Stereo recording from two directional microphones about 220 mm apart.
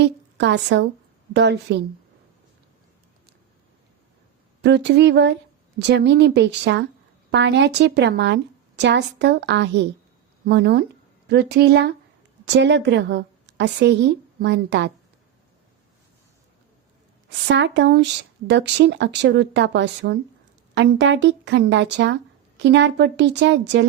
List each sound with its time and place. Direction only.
0.0 s a woman's voice: 50° right (ahead or behind)
4.6 s speech: 50° right (ahead or behind)
17.5 s speech: 50° right (ahead or behind)